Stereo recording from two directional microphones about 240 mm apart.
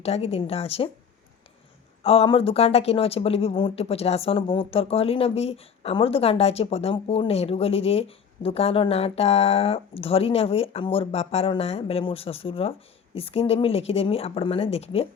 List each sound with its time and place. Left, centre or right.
0.0 s speech: left
2.0 s speech: left